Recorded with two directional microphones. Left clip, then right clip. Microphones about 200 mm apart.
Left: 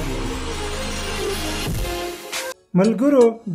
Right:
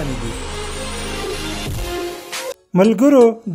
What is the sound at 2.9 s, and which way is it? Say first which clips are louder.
Music: right 5 dB; 40° right (ahead or behind).